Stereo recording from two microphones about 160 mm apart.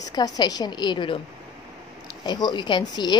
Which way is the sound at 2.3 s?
25° left (ahead or behind).